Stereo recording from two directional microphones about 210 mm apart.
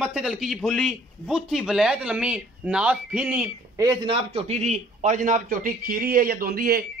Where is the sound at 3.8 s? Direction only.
20° right (ahead or behind).